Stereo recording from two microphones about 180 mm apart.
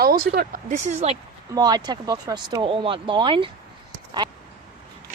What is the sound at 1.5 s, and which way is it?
Speech, 20° right (ahead or behind).